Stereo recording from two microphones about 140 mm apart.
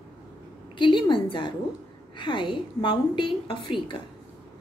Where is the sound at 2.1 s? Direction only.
35° left (ahead or behind).